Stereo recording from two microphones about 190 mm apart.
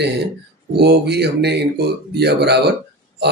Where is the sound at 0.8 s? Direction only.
60° right (ahead or behind).